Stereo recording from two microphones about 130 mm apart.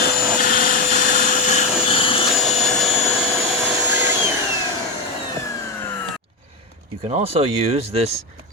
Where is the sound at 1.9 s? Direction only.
45° left (ahead or behind).